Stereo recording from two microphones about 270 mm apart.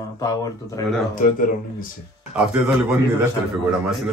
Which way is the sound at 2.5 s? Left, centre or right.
Centre.